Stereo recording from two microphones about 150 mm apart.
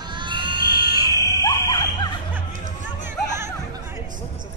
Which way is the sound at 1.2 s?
25° left (ahead or behind).